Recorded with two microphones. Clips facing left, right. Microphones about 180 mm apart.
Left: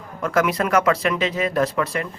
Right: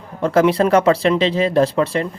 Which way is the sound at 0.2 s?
30° right (ahead or behind).